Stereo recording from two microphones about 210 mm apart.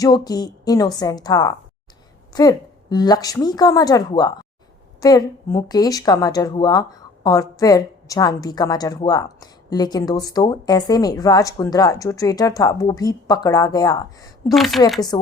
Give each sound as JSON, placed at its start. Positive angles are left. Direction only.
{"t": 0.0, "sound": "a woman's voice", "side_deg": 20}
{"t": 14.4, "sound": "a woman's voice", "side_deg": 0}
{"t": 15.1, "sound": "speech", "side_deg": 20}